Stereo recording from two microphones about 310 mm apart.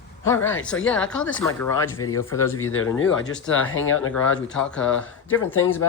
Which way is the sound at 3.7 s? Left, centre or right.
Left.